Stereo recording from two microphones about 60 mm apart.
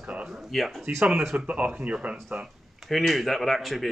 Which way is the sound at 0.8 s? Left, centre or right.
Right.